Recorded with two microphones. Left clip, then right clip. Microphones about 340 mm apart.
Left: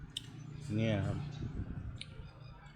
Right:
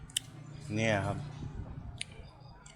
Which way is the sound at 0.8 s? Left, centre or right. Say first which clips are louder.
Right 6 dB; centre.